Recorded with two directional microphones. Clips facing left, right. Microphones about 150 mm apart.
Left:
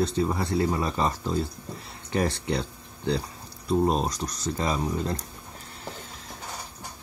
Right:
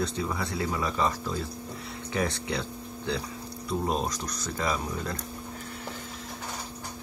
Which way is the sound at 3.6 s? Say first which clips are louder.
Left 5 dB; 25° left (ahead or behind).